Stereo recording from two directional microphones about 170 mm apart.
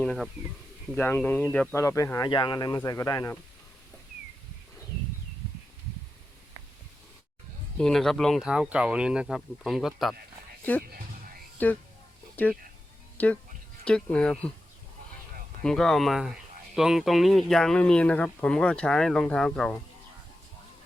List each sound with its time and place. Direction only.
0.0 s speech: 5° left (ahead or behind)
1.7 s speech: 15° left (ahead or behind)
7.8 s speech: centre (ahead or behind)
15.6 s speech: 5° left (ahead or behind)